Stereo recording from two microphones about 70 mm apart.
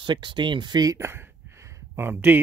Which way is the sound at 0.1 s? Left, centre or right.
Right.